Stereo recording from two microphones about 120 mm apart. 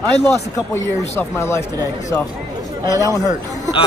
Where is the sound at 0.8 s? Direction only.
20° left (ahead or behind).